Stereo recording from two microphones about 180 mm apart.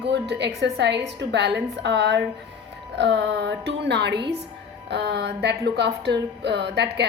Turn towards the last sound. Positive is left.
turn(degrees=-70)  # may be behind; listen again after turning